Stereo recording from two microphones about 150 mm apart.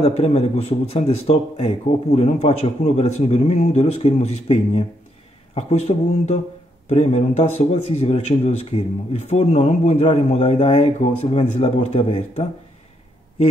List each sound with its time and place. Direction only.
0.0 s speech: 45° left (ahead or behind)